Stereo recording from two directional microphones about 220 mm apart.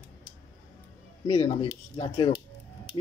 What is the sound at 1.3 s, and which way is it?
Speech, 25° left (ahead or behind).